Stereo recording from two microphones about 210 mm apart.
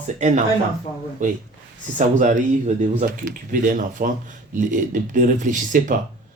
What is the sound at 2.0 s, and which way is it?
Speech, 35° right (ahead or behind).